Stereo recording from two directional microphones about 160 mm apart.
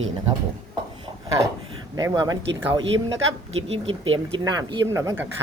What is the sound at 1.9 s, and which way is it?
Speech, 25° right (ahead or behind).